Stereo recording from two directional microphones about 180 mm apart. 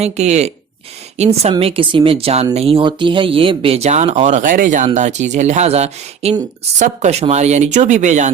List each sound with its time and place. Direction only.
0.0 s speech: 40° right (ahead or behind)